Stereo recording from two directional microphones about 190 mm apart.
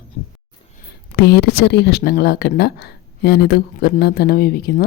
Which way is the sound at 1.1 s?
60° left (ahead or behind).